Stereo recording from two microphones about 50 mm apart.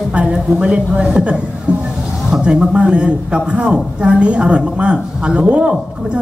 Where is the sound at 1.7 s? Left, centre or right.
Right.